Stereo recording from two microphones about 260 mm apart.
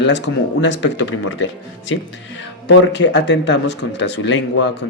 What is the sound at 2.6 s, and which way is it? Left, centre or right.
A man's voice, left.